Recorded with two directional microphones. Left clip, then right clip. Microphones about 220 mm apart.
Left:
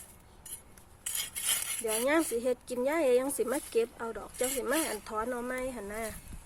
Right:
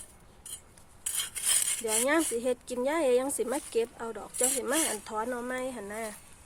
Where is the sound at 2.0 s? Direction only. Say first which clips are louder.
Right 1 dB; 5° right (ahead or behind).